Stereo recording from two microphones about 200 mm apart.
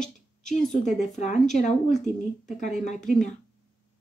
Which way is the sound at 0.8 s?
35° left (ahead or behind).